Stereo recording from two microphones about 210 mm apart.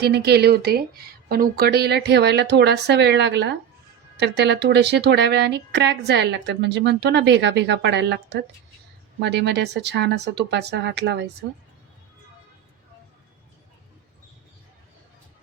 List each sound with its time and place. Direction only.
0.0 s speech: 50° right (ahead or behind)